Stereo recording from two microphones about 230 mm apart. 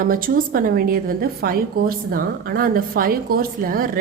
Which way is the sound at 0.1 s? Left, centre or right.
Right.